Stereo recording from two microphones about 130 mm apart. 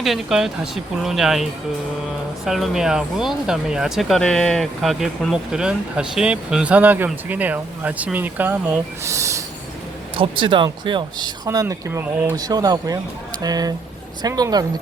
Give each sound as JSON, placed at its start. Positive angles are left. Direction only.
{"t": 0.0, "sound": "speech", "side_deg": 0}
{"t": 10.2, "sound": "speech", "side_deg": -40}